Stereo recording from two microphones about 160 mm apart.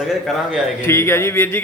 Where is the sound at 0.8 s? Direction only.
15° left (ahead or behind).